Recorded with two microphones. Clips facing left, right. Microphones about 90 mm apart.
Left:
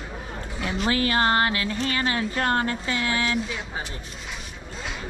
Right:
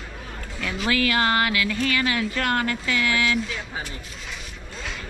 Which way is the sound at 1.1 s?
35° left (ahead or behind).